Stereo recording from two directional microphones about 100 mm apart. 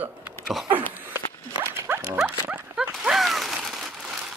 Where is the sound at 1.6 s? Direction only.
25° right (ahead or behind).